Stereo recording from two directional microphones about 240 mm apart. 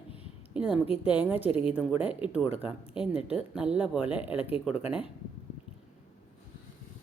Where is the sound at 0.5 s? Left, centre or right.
Centre.